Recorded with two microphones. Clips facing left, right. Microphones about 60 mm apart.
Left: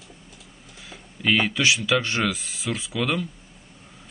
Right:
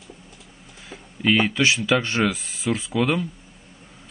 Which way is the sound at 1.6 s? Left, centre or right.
Right.